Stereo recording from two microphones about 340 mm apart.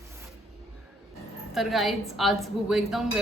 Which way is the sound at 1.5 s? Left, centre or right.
Centre.